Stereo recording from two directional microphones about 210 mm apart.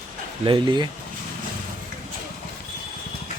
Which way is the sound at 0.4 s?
25° right (ahead or behind).